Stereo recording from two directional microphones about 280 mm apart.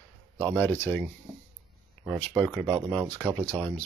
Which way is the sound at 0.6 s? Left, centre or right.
Centre.